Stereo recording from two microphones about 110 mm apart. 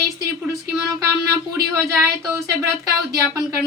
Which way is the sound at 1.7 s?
25° right (ahead or behind).